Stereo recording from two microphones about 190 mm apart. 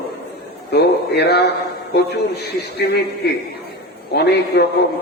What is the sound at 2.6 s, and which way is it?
Speech, 60° left (ahead or behind).